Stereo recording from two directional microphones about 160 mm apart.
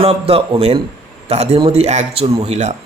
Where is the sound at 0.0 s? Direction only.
35° right (ahead or behind).